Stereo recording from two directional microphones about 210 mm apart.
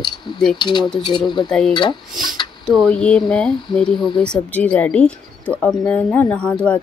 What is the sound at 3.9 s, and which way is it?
Speech, 20° left (ahead or behind).